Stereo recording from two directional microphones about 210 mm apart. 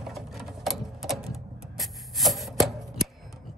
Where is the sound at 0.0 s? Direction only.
Centre (ahead or behind).